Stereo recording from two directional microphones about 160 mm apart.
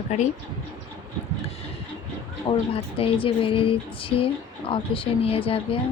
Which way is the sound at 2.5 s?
30° left (ahead or behind).